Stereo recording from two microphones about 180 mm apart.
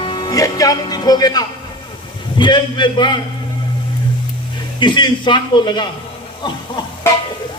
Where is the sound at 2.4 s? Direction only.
25° left (ahead or behind).